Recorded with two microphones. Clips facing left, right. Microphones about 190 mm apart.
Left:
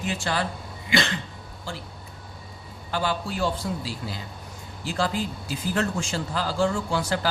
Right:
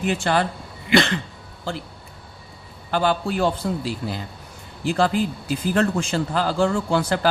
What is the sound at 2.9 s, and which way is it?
A man's voice, 60° right (ahead or behind).